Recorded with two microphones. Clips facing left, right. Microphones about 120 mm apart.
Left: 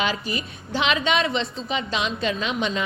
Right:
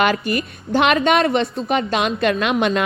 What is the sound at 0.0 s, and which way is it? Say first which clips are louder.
A woman's voice: right 7 dB; 60° right (ahead or behind).